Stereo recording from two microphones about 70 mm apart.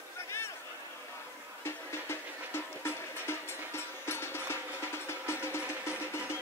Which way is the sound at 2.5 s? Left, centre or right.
Left.